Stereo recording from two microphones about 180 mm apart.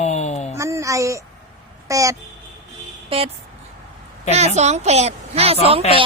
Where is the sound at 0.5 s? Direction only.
15° right (ahead or behind).